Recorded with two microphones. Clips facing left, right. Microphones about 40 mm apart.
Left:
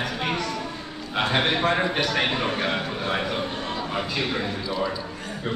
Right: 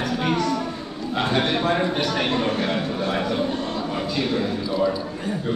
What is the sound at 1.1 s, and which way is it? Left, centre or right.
A man's voice, left.